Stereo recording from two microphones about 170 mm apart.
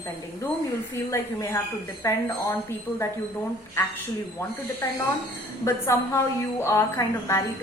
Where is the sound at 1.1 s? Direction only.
15° left (ahead or behind).